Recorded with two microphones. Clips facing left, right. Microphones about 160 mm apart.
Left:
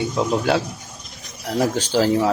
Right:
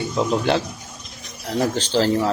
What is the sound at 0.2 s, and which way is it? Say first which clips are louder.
Speech: right 1 dB; 5° left (ahead or behind).